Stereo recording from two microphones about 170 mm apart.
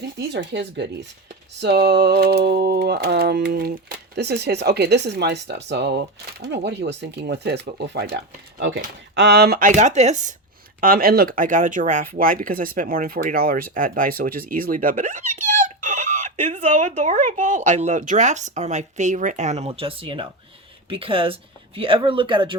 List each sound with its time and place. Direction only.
0.2 s speech: 90° right
1.5 s speech: 80° right; by 10.3 s 45° right (ahead or behind)
10.8 s speech: 60° right (ahead or behind); by 22.5 s 30° right (ahead or behind)